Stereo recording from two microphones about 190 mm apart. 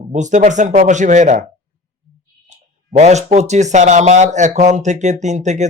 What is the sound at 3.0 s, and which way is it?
Speech, 35° right (ahead or behind).